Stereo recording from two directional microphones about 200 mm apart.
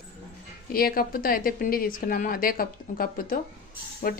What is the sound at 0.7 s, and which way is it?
Speech, 45° left (ahead or behind).